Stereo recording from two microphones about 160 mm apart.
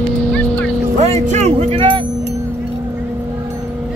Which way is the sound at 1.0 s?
45° right (ahead or behind).